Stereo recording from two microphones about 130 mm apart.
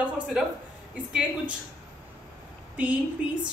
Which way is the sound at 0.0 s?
5° right (ahead or behind).